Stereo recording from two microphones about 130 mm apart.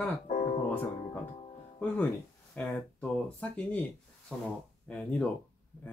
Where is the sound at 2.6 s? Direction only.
15° left (ahead or behind).